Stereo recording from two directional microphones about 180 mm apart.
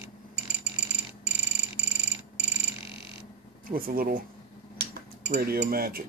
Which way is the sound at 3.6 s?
50° right (ahead or behind).